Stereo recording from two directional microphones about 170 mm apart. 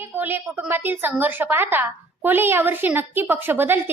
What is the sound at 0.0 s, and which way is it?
A woman's voice, 10° right (ahead or behind).